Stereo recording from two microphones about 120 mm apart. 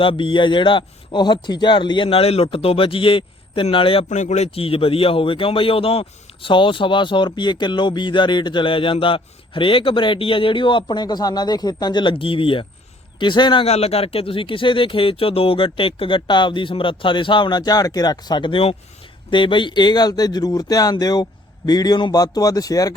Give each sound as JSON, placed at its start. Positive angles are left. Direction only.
{"t": 0.0, "sound": "a man's voice", "side_deg": 45}
{"t": 4.1, "sound": "speech", "side_deg": 80}
{"t": 4.5, "sound": "a man's voice", "side_deg": 50}
{"t": 13.7, "sound": "a man's voice", "side_deg": 60}